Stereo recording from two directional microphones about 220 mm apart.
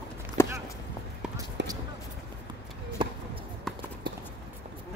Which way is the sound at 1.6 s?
55° right (ahead or behind).